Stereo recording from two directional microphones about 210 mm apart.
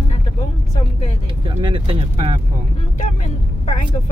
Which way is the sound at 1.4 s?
20° right (ahead or behind).